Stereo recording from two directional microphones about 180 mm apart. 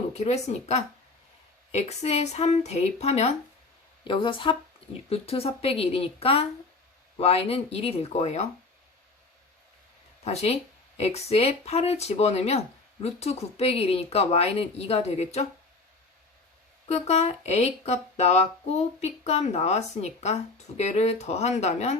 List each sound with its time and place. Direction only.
0.1 s speech: 35° left (ahead or behind)
4.0 s speech: 25° left (ahead or behind)
10.2 s speech: 35° left (ahead or behind)
16.9 s speech: 35° left (ahead or behind)